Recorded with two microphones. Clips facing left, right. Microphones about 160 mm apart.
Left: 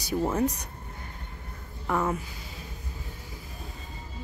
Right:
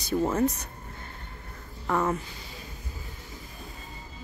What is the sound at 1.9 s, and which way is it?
Speech, 5° left (ahead or behind).